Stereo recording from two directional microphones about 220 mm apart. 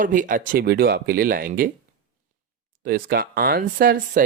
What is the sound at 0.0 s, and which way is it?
Speech, 35° right (ahead or behind).